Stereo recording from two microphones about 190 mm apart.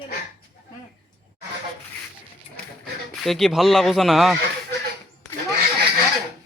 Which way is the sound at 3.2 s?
Centre (ahead or behind).